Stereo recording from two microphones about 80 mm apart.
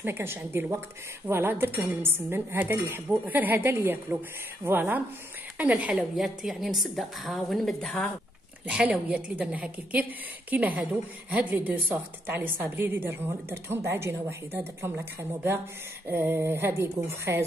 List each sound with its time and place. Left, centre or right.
0.0 s a woman's voice: right
6.1 s a woman's voice: centre
8.6 s a woman's voice: centre; by 17.4 s right